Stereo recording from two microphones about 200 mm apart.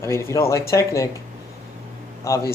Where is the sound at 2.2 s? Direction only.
15° left (ahead or behind).